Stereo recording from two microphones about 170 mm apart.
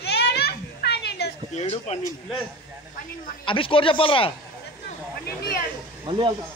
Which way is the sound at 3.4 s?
30° left (ahead or behind).